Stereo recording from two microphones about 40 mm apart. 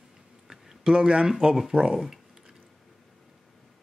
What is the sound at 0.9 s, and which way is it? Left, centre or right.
Speech, centre.